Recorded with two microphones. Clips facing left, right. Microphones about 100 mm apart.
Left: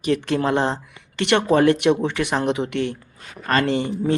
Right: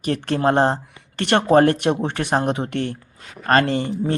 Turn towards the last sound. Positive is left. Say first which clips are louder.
# left 1 dB
turn(degrees=-40)  # may be behind; listen again after turning